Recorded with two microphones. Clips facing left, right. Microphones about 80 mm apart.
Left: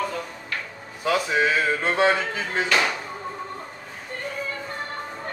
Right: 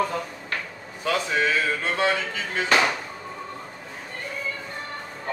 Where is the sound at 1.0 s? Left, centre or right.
Centre; by 2.7 s left.